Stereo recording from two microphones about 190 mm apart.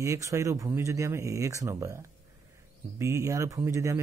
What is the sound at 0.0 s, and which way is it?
Speech, 15° right (ahead or behind).